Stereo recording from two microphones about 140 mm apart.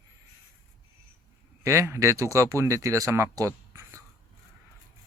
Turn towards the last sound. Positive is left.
turn(degrees=-20)  # may be behind; listen again after turning